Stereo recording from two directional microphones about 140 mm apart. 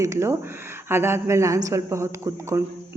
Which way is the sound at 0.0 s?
20° right (ahead or behind).